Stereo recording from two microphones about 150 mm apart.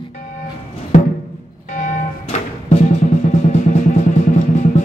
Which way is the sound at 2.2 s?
45° left (ahead or behind).